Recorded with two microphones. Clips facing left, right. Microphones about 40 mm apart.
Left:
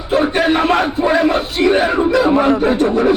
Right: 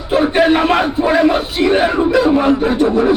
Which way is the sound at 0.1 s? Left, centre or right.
Centre.